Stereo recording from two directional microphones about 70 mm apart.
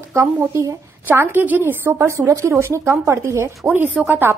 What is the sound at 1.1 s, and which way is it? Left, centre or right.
A woman's voice, right.